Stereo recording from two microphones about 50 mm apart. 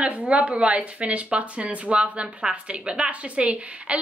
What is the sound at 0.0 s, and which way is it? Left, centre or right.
Speech, right.